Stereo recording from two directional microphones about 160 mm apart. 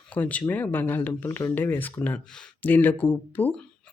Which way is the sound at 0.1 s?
10° left (ahead or behind).